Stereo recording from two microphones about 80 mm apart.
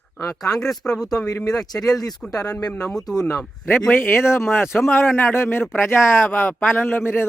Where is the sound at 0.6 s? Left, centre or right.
Centre.